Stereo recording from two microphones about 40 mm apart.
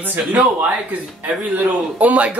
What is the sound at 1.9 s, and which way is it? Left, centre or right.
Speech, right.